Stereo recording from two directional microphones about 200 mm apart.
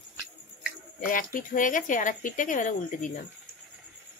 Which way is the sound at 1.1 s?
40° left (ahead or behind).